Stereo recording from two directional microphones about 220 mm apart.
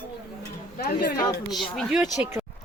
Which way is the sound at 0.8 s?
45° left (ahead or behind).